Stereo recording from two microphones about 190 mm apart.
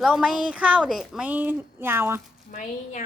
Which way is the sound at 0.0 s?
5° right (ahead or behind).